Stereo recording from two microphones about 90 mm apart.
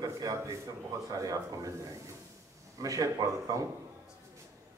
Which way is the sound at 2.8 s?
40° right (ahead or behind).